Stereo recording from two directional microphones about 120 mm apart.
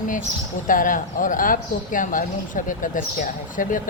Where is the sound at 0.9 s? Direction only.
90° left.